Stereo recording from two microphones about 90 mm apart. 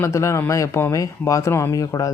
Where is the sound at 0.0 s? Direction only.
30° left (ahead or behind).